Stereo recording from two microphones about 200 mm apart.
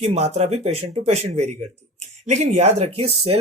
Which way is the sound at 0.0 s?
30° right (ahead or behind).